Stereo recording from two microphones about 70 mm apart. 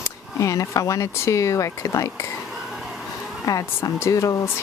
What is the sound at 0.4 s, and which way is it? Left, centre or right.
Speech, left.